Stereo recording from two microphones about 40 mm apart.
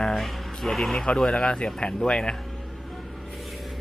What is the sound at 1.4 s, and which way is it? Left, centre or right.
Speech, left.